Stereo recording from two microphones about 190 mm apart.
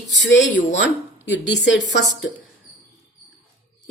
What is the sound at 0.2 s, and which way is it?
A woman's voice, 70° left (ahead or behind).